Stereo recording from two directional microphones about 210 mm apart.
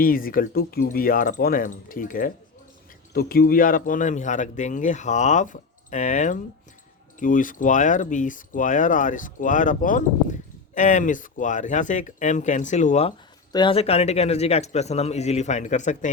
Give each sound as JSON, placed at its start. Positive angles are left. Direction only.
{"t": 0.0, "sound": "speech", "side_deg": 40}